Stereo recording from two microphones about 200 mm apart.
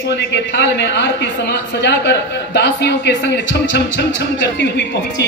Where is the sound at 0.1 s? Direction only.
60° left (ahead or behind).